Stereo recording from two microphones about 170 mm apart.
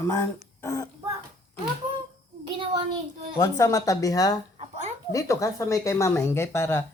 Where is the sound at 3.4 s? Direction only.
20° left (ahead or behind).